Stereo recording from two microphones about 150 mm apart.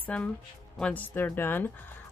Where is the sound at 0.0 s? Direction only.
10° left (ahead or behind).